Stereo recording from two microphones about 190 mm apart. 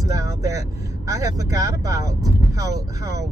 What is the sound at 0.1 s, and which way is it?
Speech, 15° right (ahead or behind).